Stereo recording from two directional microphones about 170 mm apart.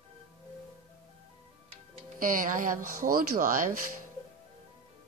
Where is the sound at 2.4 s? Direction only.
55° right (ahead or behind).